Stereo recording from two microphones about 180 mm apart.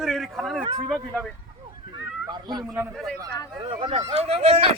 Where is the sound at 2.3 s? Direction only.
25° right (ahead or behind).